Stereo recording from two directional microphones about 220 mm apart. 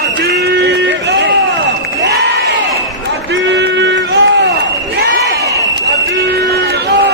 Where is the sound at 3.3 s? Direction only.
55° right (ahead or behind).